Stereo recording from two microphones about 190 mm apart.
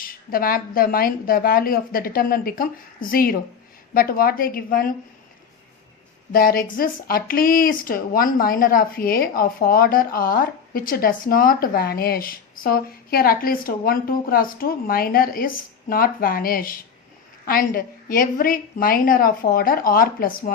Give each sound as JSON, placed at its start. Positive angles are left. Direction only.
{"t": 0.0, "sound": "speech", "side_deg": 50}
{"t": 6.3, "sound": "speech", "side_deg": 50}